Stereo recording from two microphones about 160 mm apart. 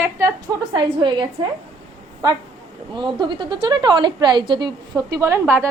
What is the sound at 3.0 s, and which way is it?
A woman's voice, 30° right (ahead or behind).